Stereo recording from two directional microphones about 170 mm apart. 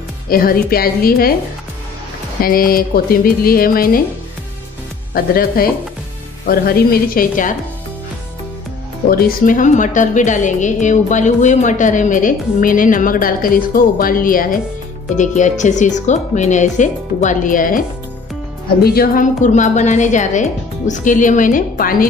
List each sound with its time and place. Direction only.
0.3 s speech: 60° left (ahead or behind)
2.4 s speech: 60° left (ahead or behind)
5.1 s speech: 60° left (ahead or behind)
9.1 s a woman's voice: 60° left (ahead or behind)
18.8 s a woman's voice: 65° left (ahead or behind)